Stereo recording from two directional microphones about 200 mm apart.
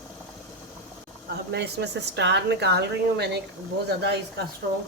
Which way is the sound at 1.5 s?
55° right (ahead or behind).